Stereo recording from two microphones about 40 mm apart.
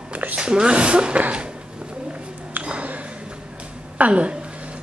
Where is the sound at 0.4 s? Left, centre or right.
Right.